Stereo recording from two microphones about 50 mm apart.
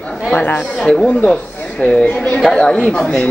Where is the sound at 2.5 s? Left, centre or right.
Centre.